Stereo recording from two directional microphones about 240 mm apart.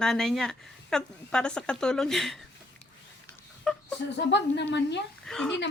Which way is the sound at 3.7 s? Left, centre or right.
Centre.